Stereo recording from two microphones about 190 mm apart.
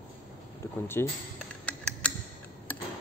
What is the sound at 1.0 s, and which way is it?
Speech, 15° left (ahead or behind).